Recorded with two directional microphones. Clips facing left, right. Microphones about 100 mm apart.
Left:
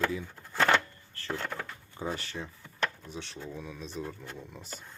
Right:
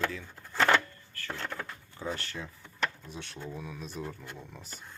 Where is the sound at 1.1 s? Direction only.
30° left (ahead or behind).